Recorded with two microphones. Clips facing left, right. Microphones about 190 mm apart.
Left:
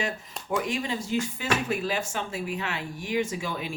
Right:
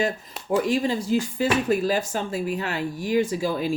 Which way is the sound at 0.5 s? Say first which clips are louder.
Right 7 dB; 35° right (ahead or behind).